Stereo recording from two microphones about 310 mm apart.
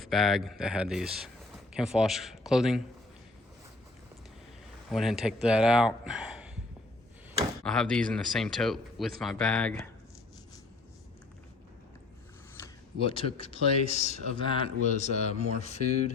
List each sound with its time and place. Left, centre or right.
0.0 s speech: centre
4.9 s speech: centre
7.6 s speech: centre
12.5 s speech: centre